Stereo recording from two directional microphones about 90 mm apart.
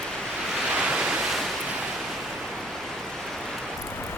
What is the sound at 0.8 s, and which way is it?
Waves, 10° right (ahead or behind).